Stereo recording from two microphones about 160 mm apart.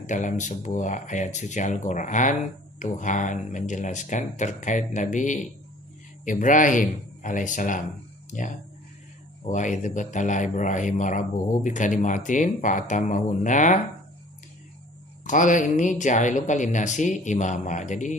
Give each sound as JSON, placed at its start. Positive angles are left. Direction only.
{"t": 0.0, "sound": "speech", "side_deg": 50}
{"t": 9.5, "sound": "speech", "side_deg": 50}
{"t": 15.2, "sound": "speech", "side_deg": 55}